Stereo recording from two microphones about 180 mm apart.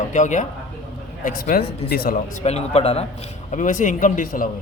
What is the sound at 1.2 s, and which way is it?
Speech, 55° left (ahead or behind).